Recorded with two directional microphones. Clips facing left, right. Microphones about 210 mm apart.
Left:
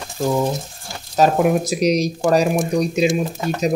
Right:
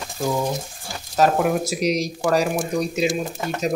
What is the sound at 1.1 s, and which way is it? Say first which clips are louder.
Speech: left 3 dB; 20° left (ahead or behind).